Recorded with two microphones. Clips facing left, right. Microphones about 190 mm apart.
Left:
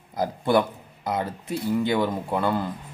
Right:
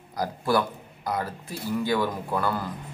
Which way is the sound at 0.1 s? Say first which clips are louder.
Left 3 dB; 20° left (ahead or behind).